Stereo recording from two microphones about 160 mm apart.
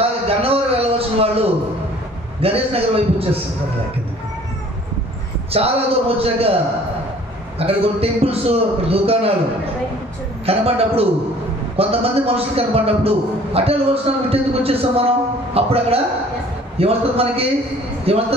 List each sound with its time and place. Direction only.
0.3 s a sound: 40° right (ahead or behind)
2.4 s a man's voice: 40° right (ahead or behind)
5.5 s a man's voice: 35° right (ahead or behind)
7.5 s a man's voice: 40° right (ahead or behind)
10.4 s a man's voice: 40° right (ahead or behind)